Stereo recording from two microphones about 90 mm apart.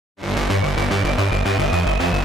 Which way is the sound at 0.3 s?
Centre (ahead or behind).